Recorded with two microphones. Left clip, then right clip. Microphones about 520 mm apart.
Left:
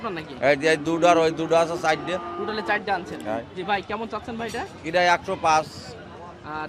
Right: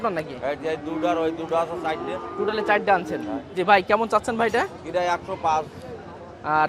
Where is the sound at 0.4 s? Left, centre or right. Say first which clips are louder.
Left 10 dB; left.